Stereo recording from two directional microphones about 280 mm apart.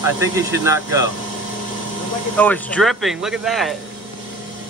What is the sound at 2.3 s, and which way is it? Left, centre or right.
Speech, centre.